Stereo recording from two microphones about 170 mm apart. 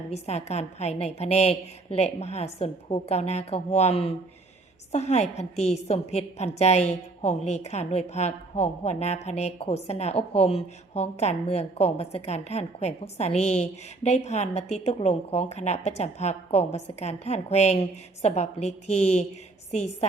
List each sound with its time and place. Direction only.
0.1 s a woman's voice: 40° left (ahead or behind)